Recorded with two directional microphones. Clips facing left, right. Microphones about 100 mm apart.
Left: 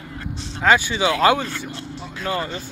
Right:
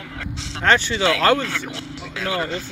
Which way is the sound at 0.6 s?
10° left (ahead or behind).